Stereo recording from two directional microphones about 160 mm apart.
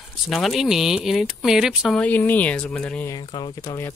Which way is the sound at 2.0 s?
10° left (ahead or behind).